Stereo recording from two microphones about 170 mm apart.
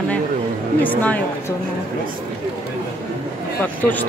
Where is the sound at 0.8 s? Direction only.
10° left (ahead or behind).